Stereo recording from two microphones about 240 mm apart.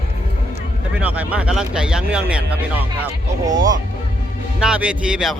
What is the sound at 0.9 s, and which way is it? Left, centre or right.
Speech, centre.